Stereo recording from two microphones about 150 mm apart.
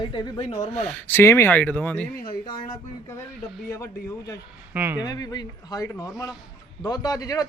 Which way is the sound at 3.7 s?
20° left (ahead or behind).